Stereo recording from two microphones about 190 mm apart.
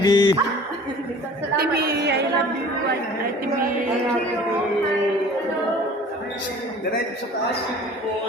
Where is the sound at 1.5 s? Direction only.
55° right (ahead or behind).